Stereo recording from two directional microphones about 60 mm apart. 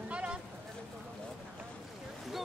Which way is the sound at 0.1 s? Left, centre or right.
Centre.